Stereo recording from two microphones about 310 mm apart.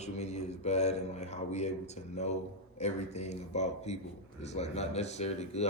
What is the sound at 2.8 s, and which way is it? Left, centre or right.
A man's voice, left.